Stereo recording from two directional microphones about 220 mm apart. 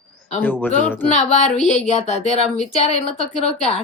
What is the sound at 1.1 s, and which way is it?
Speech, 30° left (ahead or behind).